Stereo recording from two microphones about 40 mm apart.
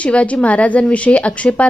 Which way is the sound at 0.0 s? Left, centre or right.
Left.